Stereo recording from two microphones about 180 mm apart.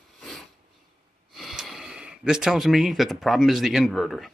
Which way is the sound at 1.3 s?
Centre (ahead or behind).